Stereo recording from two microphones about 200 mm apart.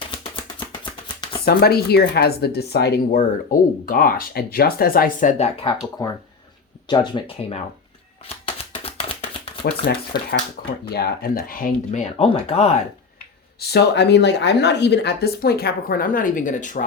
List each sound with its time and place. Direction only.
1.5 s speech: 50° left (ahead or behind)
3.2 s speech: 45° left (ahead or behind)
6.0 s speech: 15° left (ahead or behind)
8.4 s a sound: 30° left (ahead or behind)
9.8 s speech: 50° left (ahead or behind); by 12.7 s 30° left (ahead or behind)
13.6 s speech: 55° left (ahead or behind); by 16.8 s 40° left (ahead or behind)